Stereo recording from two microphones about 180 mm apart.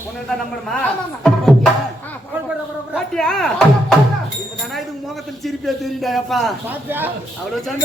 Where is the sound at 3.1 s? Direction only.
5° left (ahead or behind).